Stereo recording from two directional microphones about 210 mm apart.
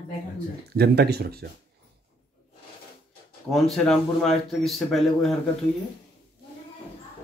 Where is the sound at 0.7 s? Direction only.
50° right (ahead or behind).